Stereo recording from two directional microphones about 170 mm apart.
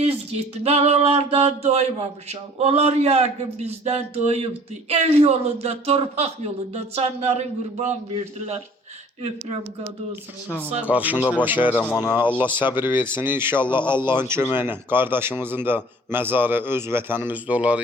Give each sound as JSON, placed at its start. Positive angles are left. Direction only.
{"t": 0.0, "sound": "a man's voice", "side_deg": -35}
{"t": 10.8, "sound": "a man's voice", "side_deg": -10}
{"t": 11.7, "sound": "speech", "side_deg": 10}
{"t": 12.3, "sound": "a man's voice", "side_deg": -10}